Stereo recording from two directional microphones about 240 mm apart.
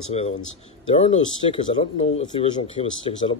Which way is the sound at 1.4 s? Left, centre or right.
Left.